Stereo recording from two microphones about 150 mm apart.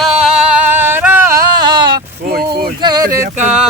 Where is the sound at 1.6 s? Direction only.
30° right (ahead or behind).